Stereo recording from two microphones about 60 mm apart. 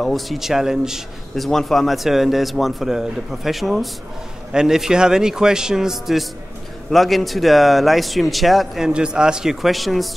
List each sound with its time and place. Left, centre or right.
0.0 s a man's voice: centre
1.3 s a man's voice: centre